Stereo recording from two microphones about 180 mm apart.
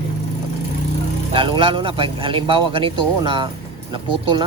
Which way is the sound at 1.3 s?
30° right (ahead or behind).